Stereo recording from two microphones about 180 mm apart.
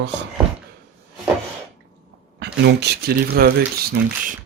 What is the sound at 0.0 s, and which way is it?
Speech, 75° right (ahead or behind).